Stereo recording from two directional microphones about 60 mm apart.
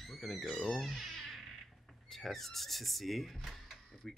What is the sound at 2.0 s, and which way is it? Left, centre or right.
Speech, centre.